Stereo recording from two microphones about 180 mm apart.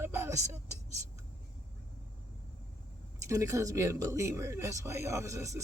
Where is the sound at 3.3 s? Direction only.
15° right (ahead or behind).